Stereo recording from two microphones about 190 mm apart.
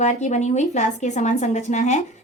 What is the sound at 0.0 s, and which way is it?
A woman's voice, 40° left (ahead or behind).